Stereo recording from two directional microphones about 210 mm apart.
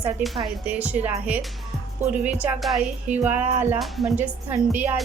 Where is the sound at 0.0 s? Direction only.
Centre (ahead or behind).